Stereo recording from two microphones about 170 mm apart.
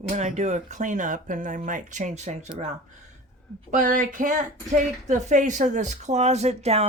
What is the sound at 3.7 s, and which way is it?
Speech, 50° right (ahead or behind).